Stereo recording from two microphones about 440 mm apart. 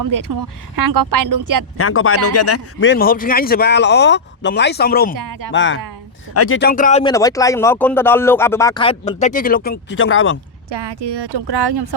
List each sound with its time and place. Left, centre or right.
0.0 s speech: right
1.8 s a man's voice: left
5.1 s speech: right
5.5 s a man's voice: left
10.7 s speech: right